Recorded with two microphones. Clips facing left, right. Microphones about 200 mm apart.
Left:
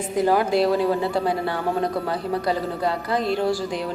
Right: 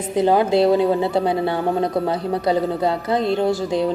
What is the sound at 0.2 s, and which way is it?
A woman's voice, 25° right (ahead or behind).